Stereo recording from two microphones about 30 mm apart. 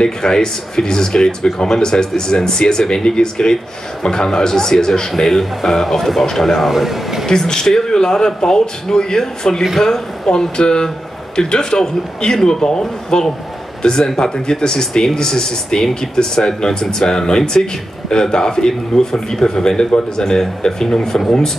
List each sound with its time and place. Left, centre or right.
0.0 s speech: left; by 7.2 s centre
7.2 s speech: left
13.1 s a man's voice: left